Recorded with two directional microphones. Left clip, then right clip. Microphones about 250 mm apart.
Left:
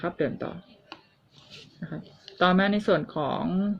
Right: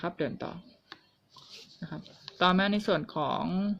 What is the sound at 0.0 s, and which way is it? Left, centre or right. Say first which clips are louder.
Speech: left 5 dB; right.